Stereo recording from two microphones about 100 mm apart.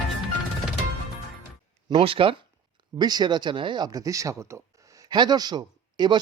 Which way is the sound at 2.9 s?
45° right (ahead or behind).